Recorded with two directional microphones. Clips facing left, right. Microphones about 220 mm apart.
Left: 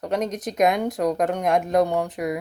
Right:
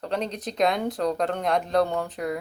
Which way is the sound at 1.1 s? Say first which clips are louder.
Left 5 dB; 15° left (ahead or behind).